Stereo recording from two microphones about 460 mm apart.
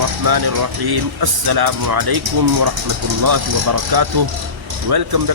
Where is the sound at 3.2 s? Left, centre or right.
Right.